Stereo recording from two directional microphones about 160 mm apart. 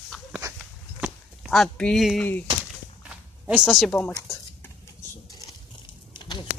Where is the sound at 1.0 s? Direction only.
Centre (ahead or behind).